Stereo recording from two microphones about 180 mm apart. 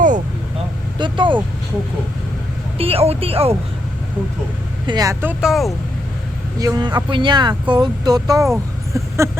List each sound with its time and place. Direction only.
0.9 s speech: 25° right (ahead or behind)
2.7 s speech: 30° right (ahead or behind)
4.9 s speech: 20° right (ahead or behind)
5.2 s speech: 5° right (ahead or behind)
6.6 s speech: 20° right (ahead or behind)
8.9 s a sound: 15° right (ahead or behind)